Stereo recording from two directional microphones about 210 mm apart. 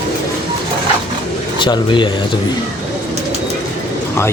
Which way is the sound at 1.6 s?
20° left (ahead or behind).